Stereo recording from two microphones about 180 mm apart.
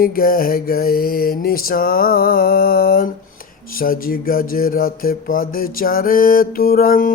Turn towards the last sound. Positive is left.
turn(degrees=55)  # may be behind; listen again after turning